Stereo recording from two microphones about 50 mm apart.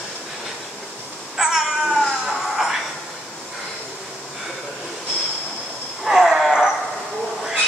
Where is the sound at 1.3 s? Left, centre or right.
Centre.